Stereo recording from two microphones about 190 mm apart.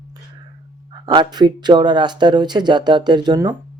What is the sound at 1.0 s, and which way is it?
Speech, 20° right (ahead or behind).